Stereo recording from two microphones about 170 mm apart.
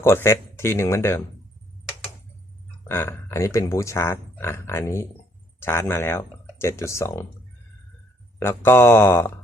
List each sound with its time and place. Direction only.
0.0 s speech: 15° left (ahead or behind)
2.8 s speech: 15° left (ahead or behind)
8.4 s speech: 15° left (ahead or behind)